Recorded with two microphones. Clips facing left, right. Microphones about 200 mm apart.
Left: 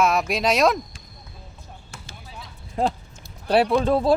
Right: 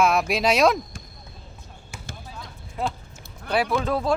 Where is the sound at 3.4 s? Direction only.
35° left (ahead or behind).